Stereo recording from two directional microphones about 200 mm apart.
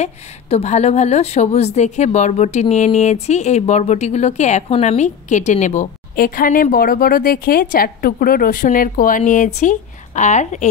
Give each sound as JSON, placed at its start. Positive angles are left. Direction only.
{"t": 0.0, "sound": "a woman's voice", "side_deg": 35}